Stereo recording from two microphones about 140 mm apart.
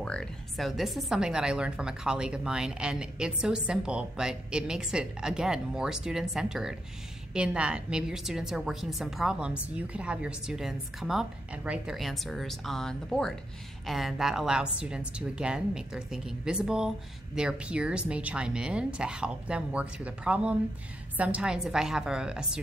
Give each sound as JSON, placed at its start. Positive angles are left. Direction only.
{"t": 0.0, "sound": "a woman's voice", "side_deg": 5}